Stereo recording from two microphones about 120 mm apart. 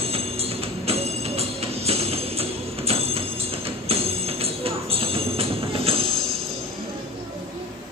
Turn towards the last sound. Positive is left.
turn(degrees=-50)  # may be behind; listen again after turning